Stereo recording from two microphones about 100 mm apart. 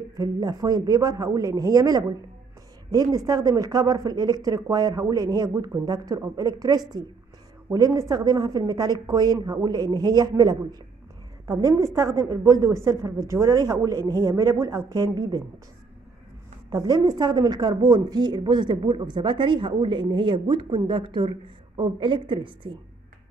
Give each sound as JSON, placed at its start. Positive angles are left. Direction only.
{"t": 0.1, "sound": "a woman's voice", "side_deg": -40}
{"t": 16.7, "sound": "a woman's voice", "side_deg": -40}